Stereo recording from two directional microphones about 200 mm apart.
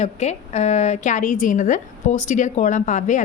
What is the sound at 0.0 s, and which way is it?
A woman's voice, 35° left (ahead or behind).